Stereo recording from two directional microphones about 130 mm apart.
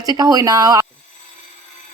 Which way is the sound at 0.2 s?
30° right (ahead or behind).